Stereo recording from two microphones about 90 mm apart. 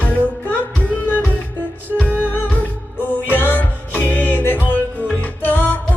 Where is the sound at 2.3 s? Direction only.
15° left (ahead or behind).